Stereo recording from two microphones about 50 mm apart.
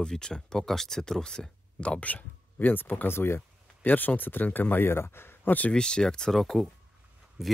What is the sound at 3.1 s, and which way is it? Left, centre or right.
Speech, left.